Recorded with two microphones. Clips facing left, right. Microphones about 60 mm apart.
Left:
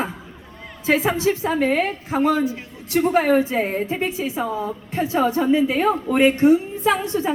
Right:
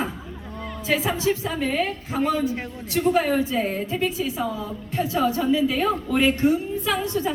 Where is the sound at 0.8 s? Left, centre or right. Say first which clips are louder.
Left 4 dB; left.